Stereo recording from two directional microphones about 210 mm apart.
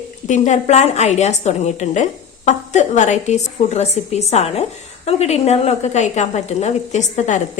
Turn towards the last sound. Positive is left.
turn(degrees=35)  # may be behind; listen again after turning